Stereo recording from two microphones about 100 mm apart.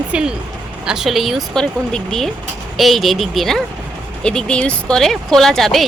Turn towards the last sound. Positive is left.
turn(degrees=5)  # may be behind; listen again after turning